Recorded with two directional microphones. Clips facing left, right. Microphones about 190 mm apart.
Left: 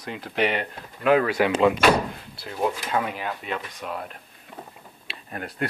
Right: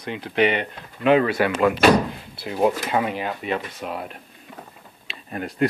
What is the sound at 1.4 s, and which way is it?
Speech, 20° left (ahead or behind).